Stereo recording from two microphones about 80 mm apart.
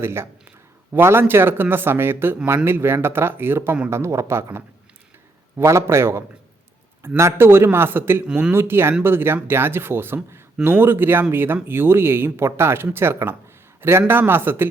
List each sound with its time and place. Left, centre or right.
0.0 s speech: right
8.3 s speech: centre
8.5 s speech: right